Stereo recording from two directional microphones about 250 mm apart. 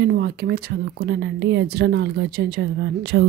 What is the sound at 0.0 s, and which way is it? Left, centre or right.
Speech, right.